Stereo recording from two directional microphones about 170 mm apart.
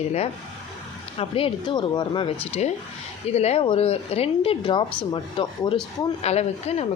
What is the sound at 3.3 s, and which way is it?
Speech, 35° left (ahead or behind).